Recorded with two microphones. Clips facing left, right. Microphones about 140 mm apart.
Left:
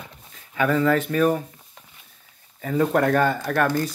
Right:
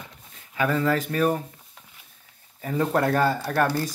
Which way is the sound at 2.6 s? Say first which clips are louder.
Left 3 dB; 30° right (ahead or behind).